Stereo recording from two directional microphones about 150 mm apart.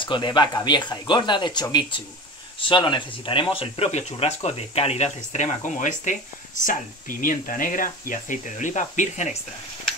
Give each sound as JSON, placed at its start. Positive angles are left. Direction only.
{"t": 0.0, "sound": "speech", "side_deg": 30}